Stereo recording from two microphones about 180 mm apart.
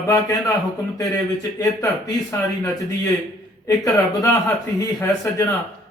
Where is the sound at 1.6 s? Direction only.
20° left (ahead or behind).